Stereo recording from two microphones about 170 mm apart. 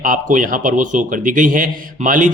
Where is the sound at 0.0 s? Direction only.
50° right (ahead or behind).